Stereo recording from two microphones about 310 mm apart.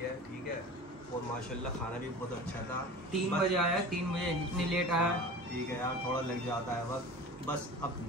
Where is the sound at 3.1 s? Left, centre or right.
Centre.